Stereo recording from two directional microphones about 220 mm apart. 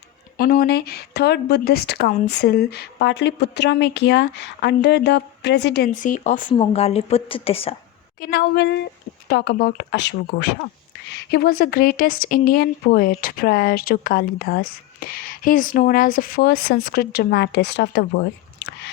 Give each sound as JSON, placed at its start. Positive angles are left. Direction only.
{"t": 0.3, "sound": "a woman's voice", "side_deg": 40}
{"t": 8.2, "sound": "a woman's voice", "side_deg": 45}